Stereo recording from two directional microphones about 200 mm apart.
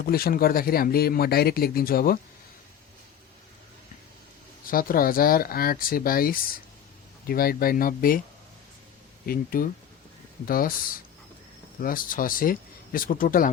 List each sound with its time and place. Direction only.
0.0 s speech: 50° left (ahead or behind)
4.6 s speech: 45° left (ahead or behind)
9.2 s speech: 45° left (ahead or behind)
11.8 s speech: 45° left (ahead or behind)